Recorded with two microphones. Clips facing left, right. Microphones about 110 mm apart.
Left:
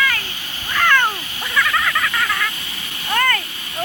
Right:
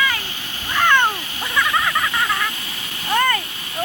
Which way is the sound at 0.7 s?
15° right (ahead or behind).